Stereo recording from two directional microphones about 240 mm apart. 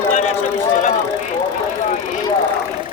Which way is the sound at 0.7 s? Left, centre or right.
Left.